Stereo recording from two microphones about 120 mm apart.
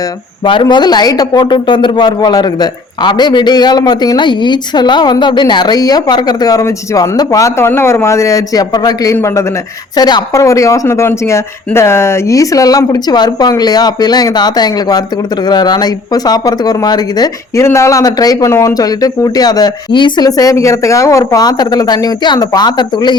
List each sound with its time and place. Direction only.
0.4 s a man's voice: 40° left (ahead or behind); by 9.5 s 25° left (ahead or behind)
9.9 s a man's voice: 35° left (ahead or behind)